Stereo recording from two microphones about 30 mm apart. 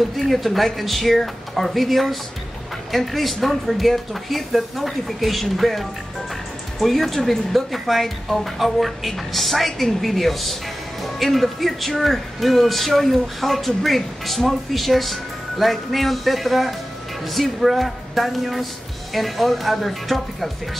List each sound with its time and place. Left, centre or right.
0.2 s a woman's voice: centre